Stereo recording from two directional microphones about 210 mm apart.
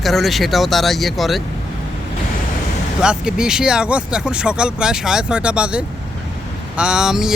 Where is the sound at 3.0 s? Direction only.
5° right (ahead or behind).